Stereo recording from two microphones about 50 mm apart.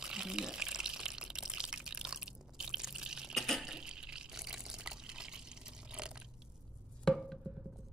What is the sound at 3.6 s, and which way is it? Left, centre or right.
Water, centre.